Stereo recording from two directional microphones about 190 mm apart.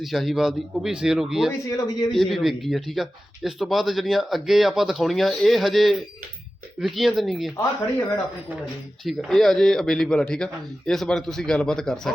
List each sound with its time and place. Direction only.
0.0 s speech: centre (ahead or behind)
1.7 s a man's voice: 20° left (ahead or behind)
2.1 s speech: centre (ahead or behind)
9.0 s speech: centre (ahead or behind)